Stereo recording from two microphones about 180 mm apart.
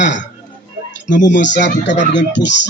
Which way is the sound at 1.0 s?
80° left.